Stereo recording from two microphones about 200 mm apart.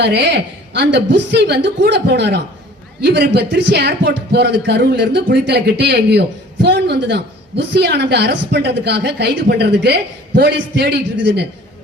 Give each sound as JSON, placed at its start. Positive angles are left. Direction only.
{"t": 0.0, "sound": "speech", "side_deg": -55}